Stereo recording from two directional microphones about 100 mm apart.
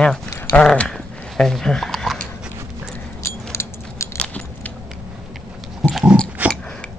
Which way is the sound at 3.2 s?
30° left (ahead or behind).